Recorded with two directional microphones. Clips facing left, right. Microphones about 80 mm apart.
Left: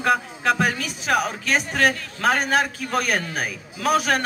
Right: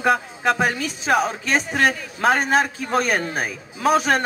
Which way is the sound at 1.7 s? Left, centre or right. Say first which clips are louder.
Even; centre.